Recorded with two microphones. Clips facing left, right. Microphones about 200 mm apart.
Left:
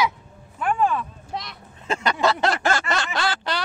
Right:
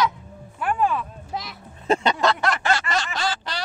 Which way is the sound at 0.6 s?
5° right (ahead or behind).